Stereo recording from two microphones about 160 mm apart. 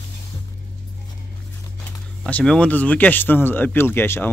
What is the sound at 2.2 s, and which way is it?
Speech, 5° left (ahead or behind).